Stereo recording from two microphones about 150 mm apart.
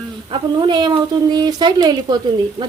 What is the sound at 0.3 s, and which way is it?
Speech, 30° right (ahead or behind).